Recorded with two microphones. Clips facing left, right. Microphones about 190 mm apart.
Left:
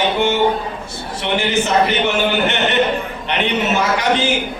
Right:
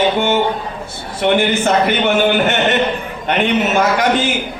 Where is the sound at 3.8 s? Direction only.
50° right (ahead or behind).